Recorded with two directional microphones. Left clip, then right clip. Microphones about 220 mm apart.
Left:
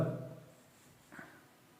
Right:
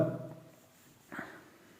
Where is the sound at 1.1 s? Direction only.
40° right (ahead or behind).